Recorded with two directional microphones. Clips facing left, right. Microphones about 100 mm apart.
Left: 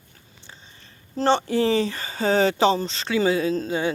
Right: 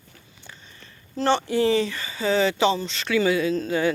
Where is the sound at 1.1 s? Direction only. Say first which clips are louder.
Left 1 dB; 30° left (ahead or behind).